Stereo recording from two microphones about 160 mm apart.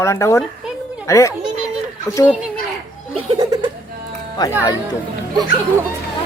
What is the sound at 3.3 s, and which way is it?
Speech, 25° right (ahead or behind).